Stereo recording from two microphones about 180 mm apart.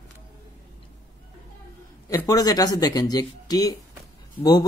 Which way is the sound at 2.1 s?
20° left (ahead or behind).